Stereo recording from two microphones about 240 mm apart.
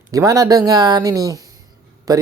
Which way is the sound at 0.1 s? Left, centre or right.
Centre.